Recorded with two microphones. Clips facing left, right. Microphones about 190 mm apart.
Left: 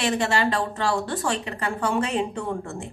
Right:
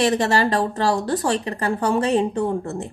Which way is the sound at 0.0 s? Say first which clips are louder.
Right 4 dB; 40° right (ahead or behind).